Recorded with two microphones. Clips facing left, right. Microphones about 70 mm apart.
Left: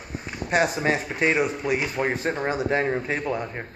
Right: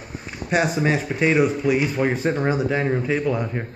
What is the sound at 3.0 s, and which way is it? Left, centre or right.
Speech, left.